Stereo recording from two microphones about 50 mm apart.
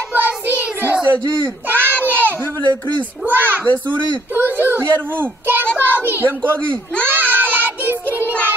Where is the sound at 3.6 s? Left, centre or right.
Left.